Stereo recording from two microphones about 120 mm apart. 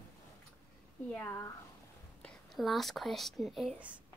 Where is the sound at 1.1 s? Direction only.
20° left (ahead or behind).